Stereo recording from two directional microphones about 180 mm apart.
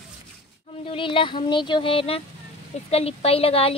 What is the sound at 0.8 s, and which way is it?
A woman's voice, 30° left (ahead or behind).